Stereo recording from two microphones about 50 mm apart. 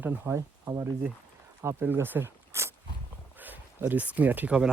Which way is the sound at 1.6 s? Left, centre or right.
Right.